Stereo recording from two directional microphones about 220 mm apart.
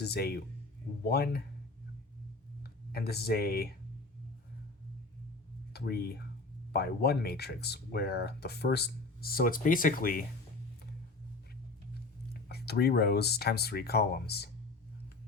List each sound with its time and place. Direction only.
0.0 s speech: 45° left (ahead or behind)
2.9 s speech: 45° left (ahead or behind)
5.7 s speech: 45° left (ahead or behind)
12.3 s speech: 45° left (ahead or behind)